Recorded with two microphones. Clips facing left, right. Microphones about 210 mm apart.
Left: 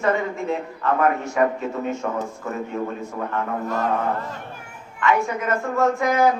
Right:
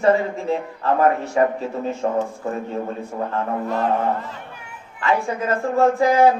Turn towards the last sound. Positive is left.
turn(degrees=-30)  # may be behind; listen again after turning